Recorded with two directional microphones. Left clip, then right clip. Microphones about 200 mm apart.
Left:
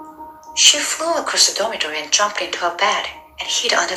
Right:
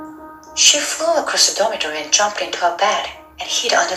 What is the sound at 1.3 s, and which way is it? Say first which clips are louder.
A woman's voice: right 1 dB; 10° left (ahead or behind).